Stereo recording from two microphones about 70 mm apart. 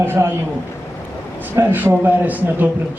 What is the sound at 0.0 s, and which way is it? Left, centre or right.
Speech, right.